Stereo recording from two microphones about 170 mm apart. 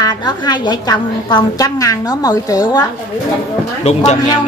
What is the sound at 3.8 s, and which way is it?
Speech, 40° left (ahead or behind).